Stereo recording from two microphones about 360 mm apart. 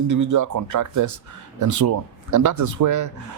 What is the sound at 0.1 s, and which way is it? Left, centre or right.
Speech, right.